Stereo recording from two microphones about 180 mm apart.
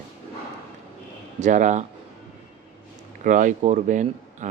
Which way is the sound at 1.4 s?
45° right (ahead or behind).